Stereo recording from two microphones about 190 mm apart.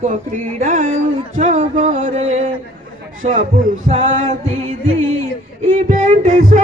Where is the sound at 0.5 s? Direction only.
40° right (ahead or behind).